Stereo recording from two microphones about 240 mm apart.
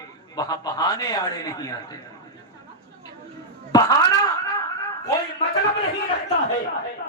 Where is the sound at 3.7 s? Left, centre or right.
Centre.